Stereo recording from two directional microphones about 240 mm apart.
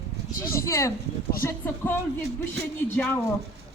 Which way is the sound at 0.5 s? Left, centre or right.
Centre.